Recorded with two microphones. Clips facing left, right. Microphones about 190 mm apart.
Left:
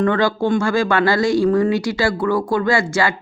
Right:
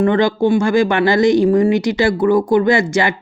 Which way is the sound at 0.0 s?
20° right (ahead or behind).